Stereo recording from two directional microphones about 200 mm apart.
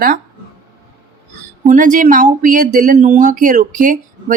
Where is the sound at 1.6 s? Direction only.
40° right (ahead or behind).